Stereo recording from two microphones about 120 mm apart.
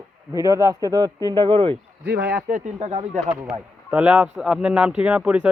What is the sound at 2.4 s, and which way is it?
Speech, 90° right.